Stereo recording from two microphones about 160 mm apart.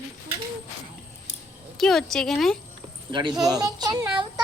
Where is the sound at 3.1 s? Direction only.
30° right (ahead or behind).